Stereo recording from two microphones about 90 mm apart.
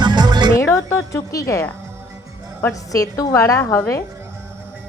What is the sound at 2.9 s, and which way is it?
A woman's voice, 40° left (ahead or behind).